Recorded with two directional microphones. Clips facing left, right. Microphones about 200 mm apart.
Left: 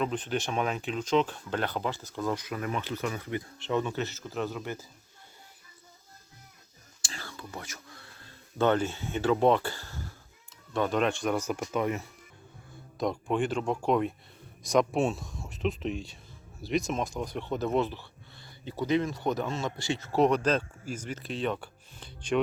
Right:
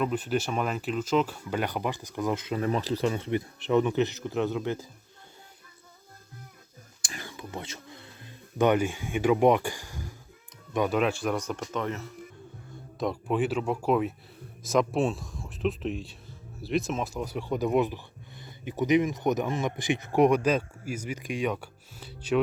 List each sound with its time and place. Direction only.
0.0 s speech: 5° right (ahead or behind)
7.1 s whispering: 15° right (ahead or behind)
10.8 s speech: 10° right (ahead or behind); by 12.1 s 15° left (ahead or behind)
13.0 s speech: 5° right (ahead or behind)